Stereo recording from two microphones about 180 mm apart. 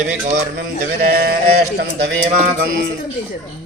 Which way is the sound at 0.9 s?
60° right (ahead or behind).